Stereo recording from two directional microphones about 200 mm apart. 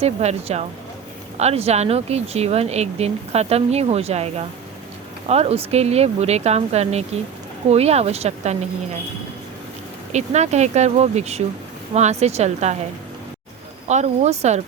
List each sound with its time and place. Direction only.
0.0 s speech: 30° right (ahead or behind)
10.1 s speech: 35° right (ahead or behind)
13.8 s speech: 35° right (ahead or behind)